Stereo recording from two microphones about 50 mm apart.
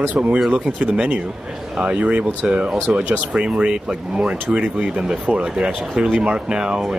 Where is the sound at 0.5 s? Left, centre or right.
Right.